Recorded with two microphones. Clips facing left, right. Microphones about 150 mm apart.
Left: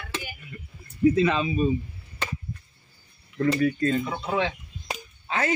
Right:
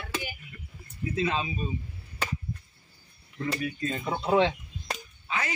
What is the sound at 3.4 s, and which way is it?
Speech, 55° left (ahead or behind).